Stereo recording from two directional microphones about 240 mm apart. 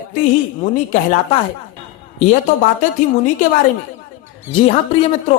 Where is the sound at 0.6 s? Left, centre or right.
Left.